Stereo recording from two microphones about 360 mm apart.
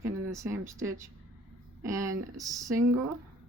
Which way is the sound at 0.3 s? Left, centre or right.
Centre.